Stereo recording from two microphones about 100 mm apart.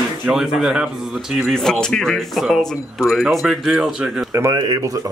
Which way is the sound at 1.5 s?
5° left (ahead or behind).